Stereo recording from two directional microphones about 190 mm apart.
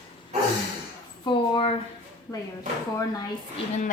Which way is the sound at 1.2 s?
25° left (ahead or behind).